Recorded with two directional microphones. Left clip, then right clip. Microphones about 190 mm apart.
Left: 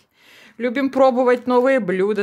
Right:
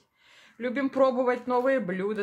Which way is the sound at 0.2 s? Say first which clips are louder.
Left 9 dB; 55° left (ahead or behind).